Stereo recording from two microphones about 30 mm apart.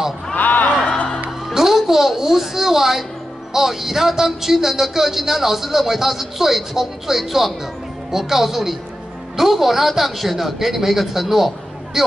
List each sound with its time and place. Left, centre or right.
0.4 s a sound: left
0.7 s music: left
1.5 s music: centre
1.9 s a woman's voice: centre